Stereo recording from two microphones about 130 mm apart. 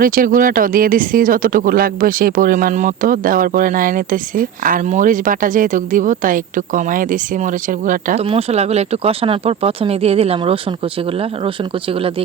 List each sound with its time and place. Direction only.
0.0 s speech: 90° right
8.2 s speech: 50° right (ahead or behind)